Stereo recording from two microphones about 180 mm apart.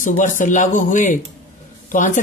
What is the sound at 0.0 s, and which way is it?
Speech, 45° left (ahead or behind).